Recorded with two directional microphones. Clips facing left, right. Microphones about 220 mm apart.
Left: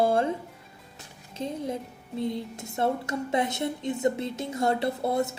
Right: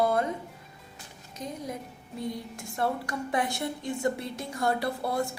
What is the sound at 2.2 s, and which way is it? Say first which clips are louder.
A woman's voice: left 4 dB; 25° left (ahead or behind).